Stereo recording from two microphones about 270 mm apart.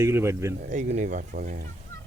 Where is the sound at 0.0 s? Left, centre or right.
Centre.